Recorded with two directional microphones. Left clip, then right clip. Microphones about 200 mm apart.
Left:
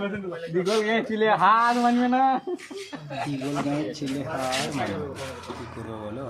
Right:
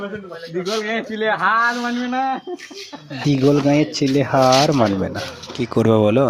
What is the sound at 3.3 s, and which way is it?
Speech, 40° right (ahead or behind).